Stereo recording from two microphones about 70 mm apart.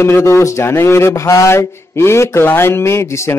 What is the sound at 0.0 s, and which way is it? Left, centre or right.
Speech, left.